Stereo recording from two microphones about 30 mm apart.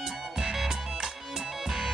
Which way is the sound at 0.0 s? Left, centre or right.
Centre.